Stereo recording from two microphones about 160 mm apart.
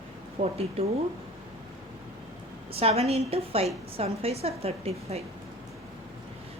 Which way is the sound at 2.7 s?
40° right (ahead or behind).